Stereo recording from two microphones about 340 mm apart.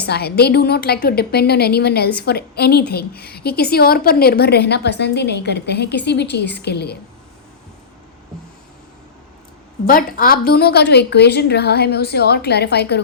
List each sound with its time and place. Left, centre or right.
0.0 s a woman's voice: left
9.8 s a woman's voice: left